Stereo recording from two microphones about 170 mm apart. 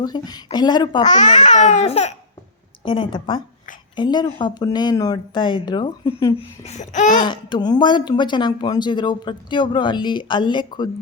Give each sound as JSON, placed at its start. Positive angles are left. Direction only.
{"t": 0.0, "sound": "speech", "side_deg": 25}
{"t": 1.0, "sound": "babbling", "side_deg": 45}
{"t": 2.8, "sound": "speech", "side_deg": 30}
{"t": 6.6, "sound": "babbling", "side_deg": 40}
{"t": 7.3, "sound": "speech", "side_deg": 25}